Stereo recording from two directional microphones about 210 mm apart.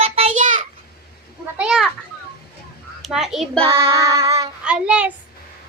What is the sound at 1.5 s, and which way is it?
Children playing, 5° right (ahead or behind).